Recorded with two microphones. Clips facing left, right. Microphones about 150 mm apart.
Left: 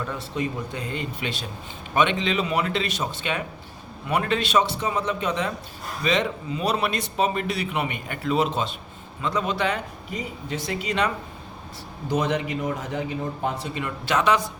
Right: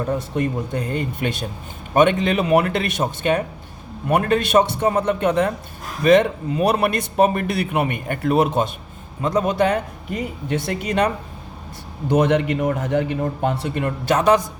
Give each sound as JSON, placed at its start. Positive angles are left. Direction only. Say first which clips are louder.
{"t": 0.0, "sound": "a man's voice", "louder": "right 6 dB", "side_deg": -50}
{"t": 12.0, "sound": "speech", "louder": "right 7 dB", "side_deg": -60}